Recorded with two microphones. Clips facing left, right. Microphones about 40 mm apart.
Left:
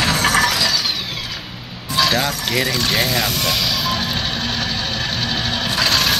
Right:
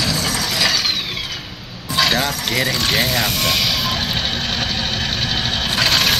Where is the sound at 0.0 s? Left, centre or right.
Left.